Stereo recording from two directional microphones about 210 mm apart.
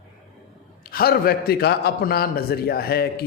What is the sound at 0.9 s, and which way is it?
A man's voice, 45° left (ahead or behind).